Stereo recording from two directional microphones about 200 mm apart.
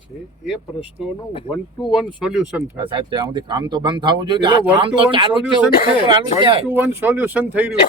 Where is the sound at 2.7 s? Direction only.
25° right (ahead or behind).